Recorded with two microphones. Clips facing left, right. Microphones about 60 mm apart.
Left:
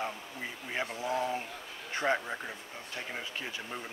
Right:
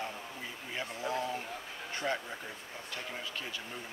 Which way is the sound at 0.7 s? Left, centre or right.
Left.